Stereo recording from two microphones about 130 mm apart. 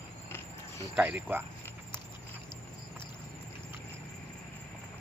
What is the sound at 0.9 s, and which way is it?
Speech, 10° right (ahead or behind).